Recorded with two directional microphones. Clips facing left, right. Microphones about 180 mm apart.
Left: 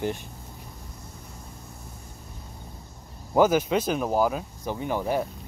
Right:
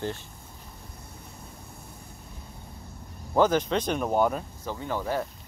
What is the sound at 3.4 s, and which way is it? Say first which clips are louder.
Speech: left 2 dB; 10° left (ahead or behind).